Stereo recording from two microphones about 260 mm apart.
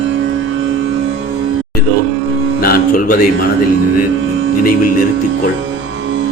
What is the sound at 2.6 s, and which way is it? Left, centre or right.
Music, left.